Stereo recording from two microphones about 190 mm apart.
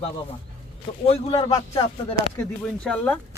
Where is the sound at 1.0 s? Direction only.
30° left (ahead or behind).